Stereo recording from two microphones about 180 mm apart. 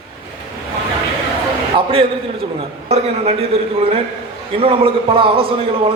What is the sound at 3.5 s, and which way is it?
A man's voice, 30° right (ahead or behind).